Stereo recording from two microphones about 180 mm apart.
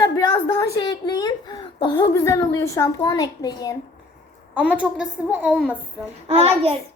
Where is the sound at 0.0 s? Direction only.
20° left (ahead or behind).